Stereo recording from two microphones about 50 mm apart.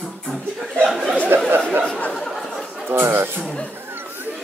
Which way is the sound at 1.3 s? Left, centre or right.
Right.